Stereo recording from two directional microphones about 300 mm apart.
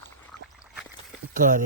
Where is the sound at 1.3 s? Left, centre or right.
Right.